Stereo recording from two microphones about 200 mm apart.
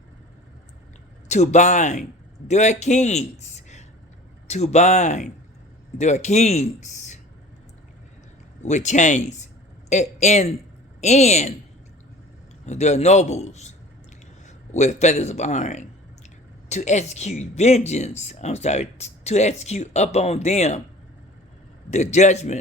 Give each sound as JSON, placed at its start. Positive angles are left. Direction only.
{"t": 1.3, "sound": "speech", "side_deg": 35}
{"t": 8.6, "sound": "speech", "side_deg": 35}
{"t": 12.6, "sound": "a man's voice", "side_deg": 35}
{"t": 21.8, "sound": "speech", "side_deg": 35}